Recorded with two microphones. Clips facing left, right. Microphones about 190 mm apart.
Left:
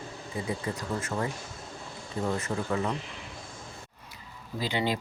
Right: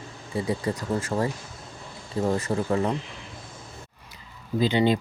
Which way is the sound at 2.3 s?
35° right (ahead or behind).